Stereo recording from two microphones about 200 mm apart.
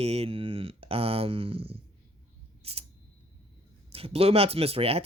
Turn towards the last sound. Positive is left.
turn(degrees=-30)  # may be behind; listen again after turning